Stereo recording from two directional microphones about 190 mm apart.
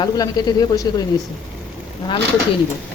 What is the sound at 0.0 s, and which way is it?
A woman's voice, 20° left (ahead or behind).